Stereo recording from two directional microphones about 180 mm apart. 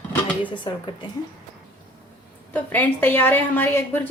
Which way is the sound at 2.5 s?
10° left (ahead or behind).